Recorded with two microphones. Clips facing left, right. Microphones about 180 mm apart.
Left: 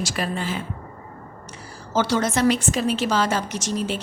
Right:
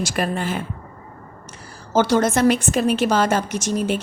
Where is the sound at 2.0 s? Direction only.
50° right (ahead or behind).